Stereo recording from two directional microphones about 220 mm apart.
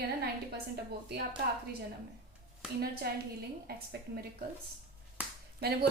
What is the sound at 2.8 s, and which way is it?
A woman's voice, 45° right (ahead or behind).